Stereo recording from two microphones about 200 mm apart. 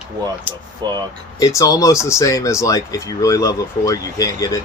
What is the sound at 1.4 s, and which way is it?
Speech, 15° left (ahead or behind).